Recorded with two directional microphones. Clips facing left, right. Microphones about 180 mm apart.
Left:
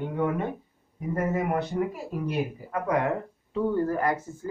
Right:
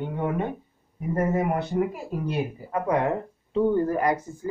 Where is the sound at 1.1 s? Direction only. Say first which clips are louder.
Right 2 dB; 35° right (ahead or behind).